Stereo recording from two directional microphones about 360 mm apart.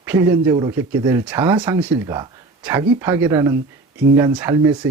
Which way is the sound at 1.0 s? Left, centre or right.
Centre.